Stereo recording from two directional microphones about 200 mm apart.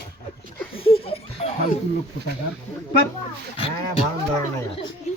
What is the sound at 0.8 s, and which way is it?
Laughter, 30° left (ahead or behind).